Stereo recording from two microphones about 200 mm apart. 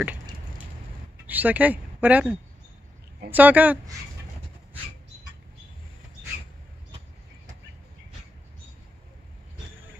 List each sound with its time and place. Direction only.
1.2 s a woman's voice: 10° right (ahead or behind)